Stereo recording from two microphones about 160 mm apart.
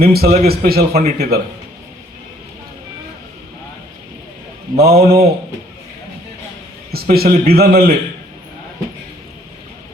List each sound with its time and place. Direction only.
0.0 s a man's voice: 75° right (ahead or behind)
4.8 s a man's voice: 75° right (ahead or behind)
6.9 s a man's voice: 75° right (ahead or behind)